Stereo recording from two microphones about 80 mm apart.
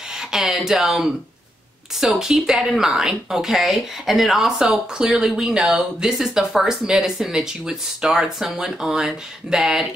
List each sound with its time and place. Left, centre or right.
0.3 s speech: centre